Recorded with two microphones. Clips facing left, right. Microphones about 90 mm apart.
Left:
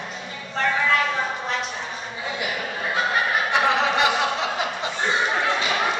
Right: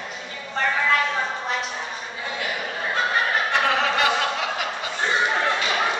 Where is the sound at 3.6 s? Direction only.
20° left (ahead or behind).